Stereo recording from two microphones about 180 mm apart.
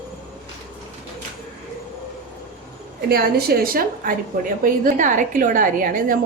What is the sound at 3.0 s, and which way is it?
A woman's voice, 60° right (ahead or behind).